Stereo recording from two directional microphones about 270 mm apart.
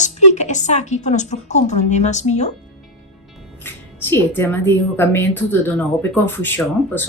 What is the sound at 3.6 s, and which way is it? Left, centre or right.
Speech, centre.